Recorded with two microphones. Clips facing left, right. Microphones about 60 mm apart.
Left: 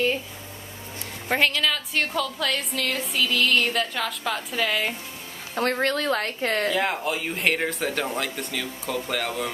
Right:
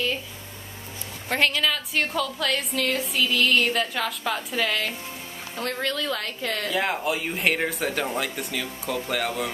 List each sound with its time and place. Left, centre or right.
1.3 s a woman's voice: centre
5.5 s speech: left
6.7 s a woman's voice: centre